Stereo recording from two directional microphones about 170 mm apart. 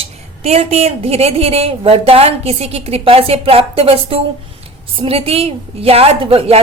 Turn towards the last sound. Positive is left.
turn(degrees=-35)  # may be behind; listen again after turning